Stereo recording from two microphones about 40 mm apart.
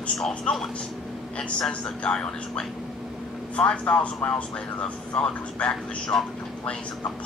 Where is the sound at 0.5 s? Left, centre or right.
Left.